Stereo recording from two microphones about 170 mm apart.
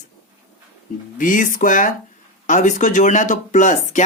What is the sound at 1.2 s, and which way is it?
Speech, 50° left (ahead or behind).